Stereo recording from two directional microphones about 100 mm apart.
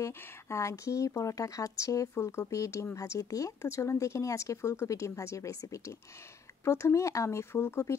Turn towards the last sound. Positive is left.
turn(degrees=25)  # may be behind; listen again after turning